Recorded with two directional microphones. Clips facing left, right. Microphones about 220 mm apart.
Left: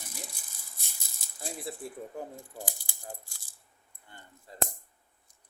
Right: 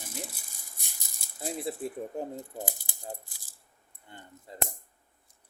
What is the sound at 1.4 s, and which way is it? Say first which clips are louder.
Speech: right 5 dB; 20° right (ahead or behind).